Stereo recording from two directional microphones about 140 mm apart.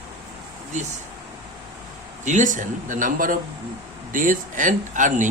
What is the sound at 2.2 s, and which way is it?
A man's voice, 60° right (ahead or behind).